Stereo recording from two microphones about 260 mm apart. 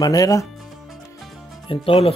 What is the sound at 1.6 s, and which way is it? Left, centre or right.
Speech, left.